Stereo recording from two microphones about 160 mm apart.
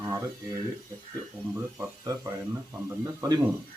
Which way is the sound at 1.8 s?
20° right (ahead or behind).